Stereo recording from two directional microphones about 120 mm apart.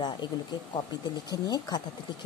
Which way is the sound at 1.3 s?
35° left (ahead or behind).